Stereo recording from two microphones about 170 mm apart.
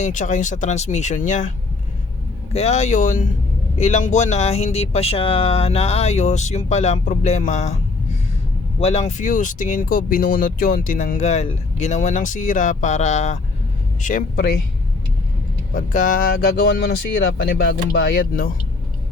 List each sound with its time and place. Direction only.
0.0 s speech: 50° left (ahead or behind)
8.8 s speech: 40° left (ahead or behind)
14.0 s speech: 55° left (ahead or behind)
15.7 s speech: 50° left (ahead or behind)